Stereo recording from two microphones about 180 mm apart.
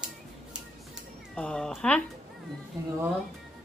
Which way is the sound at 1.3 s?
5° left (ahead or behind).